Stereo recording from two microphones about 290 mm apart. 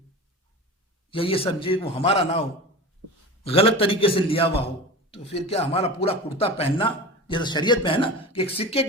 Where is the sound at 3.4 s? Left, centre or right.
Centre.